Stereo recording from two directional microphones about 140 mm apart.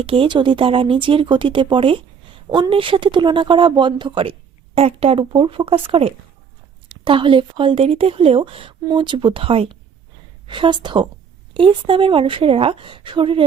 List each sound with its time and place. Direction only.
0.0 s speech: 40° right (ahead or behind)